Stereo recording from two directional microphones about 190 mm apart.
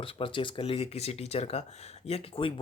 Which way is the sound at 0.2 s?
25° left (ahead or behind).